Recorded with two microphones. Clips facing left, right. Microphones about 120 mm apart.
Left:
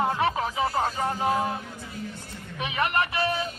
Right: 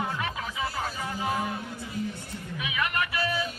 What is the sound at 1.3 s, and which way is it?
Speech, 30° left (ahead or behind).